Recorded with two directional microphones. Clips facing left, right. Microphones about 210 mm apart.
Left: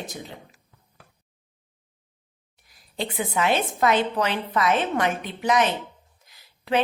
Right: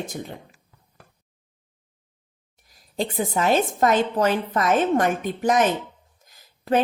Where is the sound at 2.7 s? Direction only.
45° right (ahead or behind).